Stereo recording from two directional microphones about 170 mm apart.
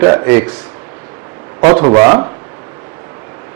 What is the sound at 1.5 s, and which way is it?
Speech, 35° right (ahead or behind).